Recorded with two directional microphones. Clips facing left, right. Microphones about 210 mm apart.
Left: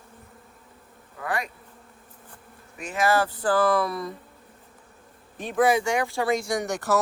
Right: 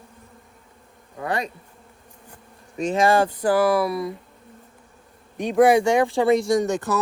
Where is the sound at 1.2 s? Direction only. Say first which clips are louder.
Right 4 dB; 25° right (ahead or behind).